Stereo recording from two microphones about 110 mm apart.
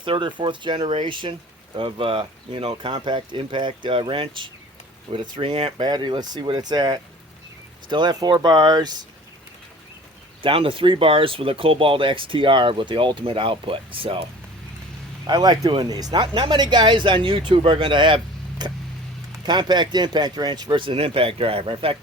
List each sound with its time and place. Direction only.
0.0 s speech: 50° right (ahead or behind)
10.4 s speech: 55° right (ahead or behind)
15.3 s speech: 35° right (ahead or behind)
16.2 s speech: 50° right (ahead or behind)